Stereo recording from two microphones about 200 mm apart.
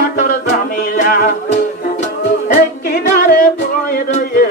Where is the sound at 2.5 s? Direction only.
50° left (ahead or behind).